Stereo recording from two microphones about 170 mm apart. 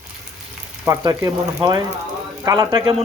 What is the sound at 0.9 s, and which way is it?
Speech, 20° right (ahead or behind).